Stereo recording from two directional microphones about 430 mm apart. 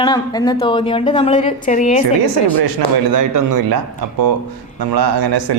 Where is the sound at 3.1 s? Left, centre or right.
Right.